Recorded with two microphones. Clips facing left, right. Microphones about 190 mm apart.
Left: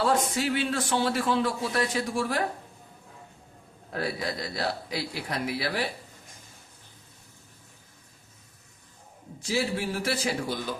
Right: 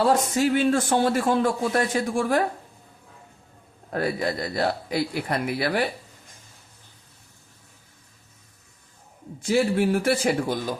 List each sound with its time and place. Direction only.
0.1 s a man's voice: 45° right (ahead or behind)
3.9 s a man's voice: 50° right (ahead or behind)
9.4 s a man's voice: 55° right (ahead or behind)